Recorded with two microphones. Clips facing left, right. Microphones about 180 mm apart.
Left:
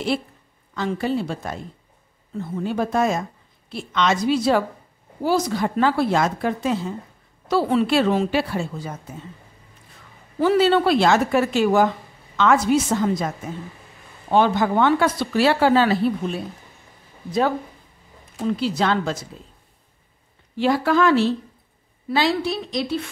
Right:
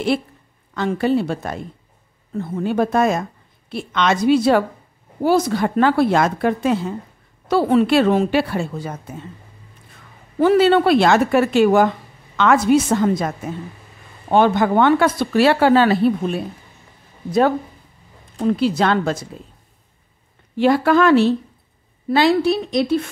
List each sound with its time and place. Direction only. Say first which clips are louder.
0.7 s a woman's voice: right 5 dB; 60° right (ahead or behind)
10.4 s a woman's voice: right 3 dB; 55° right (ahead or behind)
14.3 s a woman's voice: right 3 dB; 55° right (ahead or behind)
18.5 s a woman's voice: right 4 dB; 55° right (ahead or behind)
20.5 s a woman's voice: right 4 dB; 60° right (ahead or behind)